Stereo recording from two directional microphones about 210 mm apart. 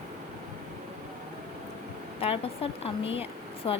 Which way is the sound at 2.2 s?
25° left (ahead or behind).